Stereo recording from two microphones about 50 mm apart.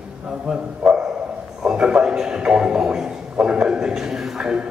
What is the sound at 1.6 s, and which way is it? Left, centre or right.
A man's voice, centre.